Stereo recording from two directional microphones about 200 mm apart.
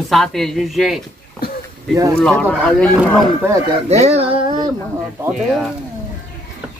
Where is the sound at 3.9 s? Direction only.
30° right (ahead or behind).